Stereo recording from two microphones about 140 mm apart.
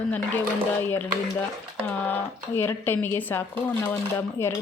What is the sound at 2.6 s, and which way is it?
A woman's voice, 15° left (ahead or behind).